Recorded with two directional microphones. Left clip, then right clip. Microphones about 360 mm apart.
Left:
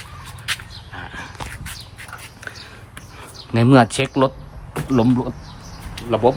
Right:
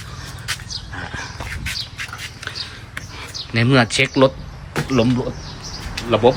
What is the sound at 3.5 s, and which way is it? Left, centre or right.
Speech, centre.